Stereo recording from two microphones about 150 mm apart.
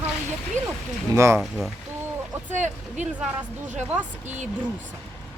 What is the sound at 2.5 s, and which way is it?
Speech, 55° right (ahead or behind).